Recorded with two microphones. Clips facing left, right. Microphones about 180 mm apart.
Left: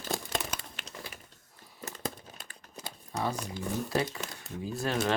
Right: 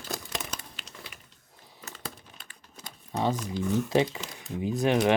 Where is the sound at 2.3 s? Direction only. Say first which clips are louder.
Left 3 dB; 40° left (ahead or behind).